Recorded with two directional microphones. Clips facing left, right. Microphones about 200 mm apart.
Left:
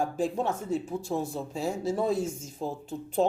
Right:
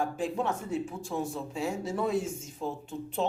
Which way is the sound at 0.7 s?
35° left (ahead or behind).